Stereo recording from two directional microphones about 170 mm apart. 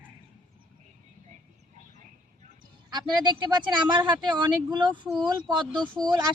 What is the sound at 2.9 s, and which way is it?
Speech, 25° right (ahead or behind).